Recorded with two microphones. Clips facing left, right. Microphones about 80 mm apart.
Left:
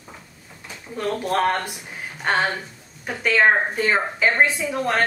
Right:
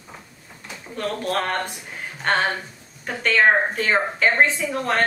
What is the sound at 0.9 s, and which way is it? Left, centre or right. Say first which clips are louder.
A woman's voice: left 2 dB; centre.